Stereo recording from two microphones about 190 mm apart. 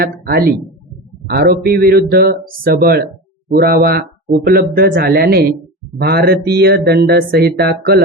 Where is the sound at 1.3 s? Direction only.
55° right (ahead or behind).